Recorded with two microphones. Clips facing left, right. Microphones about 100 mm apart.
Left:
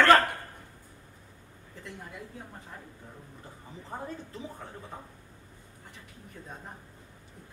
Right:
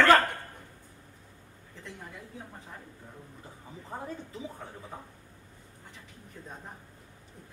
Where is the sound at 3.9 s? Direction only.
5° right (ahead or behind).